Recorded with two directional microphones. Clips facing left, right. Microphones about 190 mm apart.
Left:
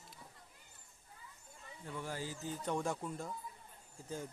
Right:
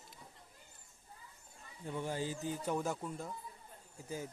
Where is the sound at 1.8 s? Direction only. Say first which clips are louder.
Right 5 dB; 20° right (ahead or behind).